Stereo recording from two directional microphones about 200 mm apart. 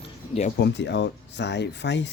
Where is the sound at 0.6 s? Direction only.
60° left (ahead or behind).